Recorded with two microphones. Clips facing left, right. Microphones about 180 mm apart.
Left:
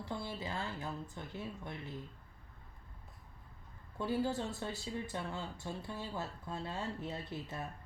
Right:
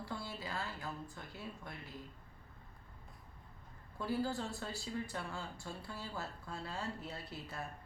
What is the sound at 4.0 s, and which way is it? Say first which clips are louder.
Speech: left 2 dB; 20° left (ahead or behind).